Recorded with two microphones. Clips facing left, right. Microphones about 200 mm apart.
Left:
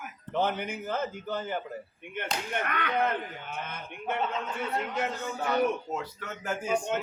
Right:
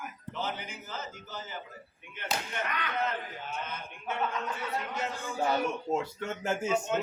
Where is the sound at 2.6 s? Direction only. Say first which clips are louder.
Left 5 dB; 55° left (ahead or behind).